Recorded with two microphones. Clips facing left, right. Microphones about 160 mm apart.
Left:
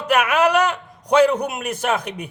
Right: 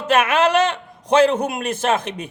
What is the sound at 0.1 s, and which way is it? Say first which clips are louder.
Speech: right 1 dB; 25° right (ahead or behind).